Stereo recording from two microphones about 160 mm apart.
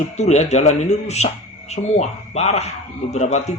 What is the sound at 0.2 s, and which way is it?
A man's voice, 45° left (ahead or behind).